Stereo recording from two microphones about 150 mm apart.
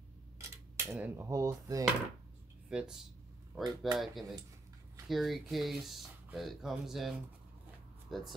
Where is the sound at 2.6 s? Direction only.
5° right (ahead or behind).